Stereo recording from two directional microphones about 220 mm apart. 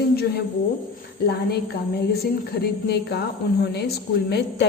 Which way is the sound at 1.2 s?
45° left (ahead or behind).